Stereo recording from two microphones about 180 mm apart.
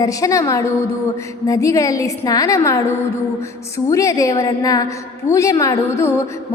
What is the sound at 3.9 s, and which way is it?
A woman's voice, 15° left (ahead or behind).